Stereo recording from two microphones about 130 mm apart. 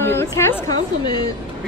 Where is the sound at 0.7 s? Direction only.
30° left (ahead or behind).